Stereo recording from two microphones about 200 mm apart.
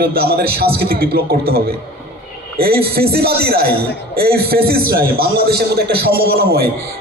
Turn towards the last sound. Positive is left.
turn(degrees=-50)  # may be behind; listen again after turning